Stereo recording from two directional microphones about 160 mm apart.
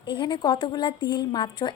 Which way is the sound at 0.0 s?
30° left (ahead or behind).